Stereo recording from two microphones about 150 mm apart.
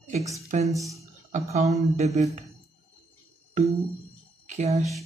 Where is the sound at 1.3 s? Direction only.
50° right (ahead or behind).